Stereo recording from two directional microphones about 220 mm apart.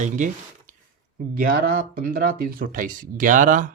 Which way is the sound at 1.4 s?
40° right (ahead or behind).